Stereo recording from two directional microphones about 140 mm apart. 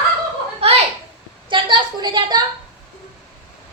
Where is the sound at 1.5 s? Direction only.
35° right (ahead or behind).